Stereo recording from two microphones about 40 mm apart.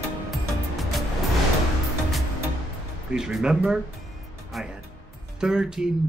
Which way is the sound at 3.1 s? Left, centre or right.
Centre.